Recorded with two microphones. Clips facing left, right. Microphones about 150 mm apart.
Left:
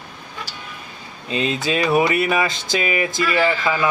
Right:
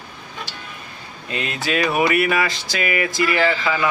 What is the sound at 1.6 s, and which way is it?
Speech, 25° left (ahead or behind).